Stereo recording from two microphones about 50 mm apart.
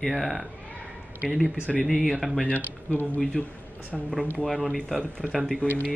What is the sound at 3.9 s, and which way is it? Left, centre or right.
Speech, centre.